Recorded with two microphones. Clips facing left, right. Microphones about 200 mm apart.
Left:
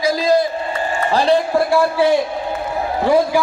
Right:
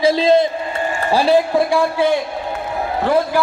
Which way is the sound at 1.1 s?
5° right (ahead or behind).